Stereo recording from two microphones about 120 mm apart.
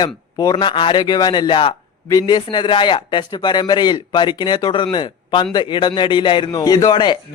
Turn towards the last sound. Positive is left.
turn(degrees=40)  # may be behind; listen again after turning